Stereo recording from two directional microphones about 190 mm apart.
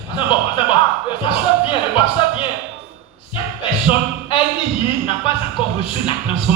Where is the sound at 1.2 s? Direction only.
25° left (ahead or behind).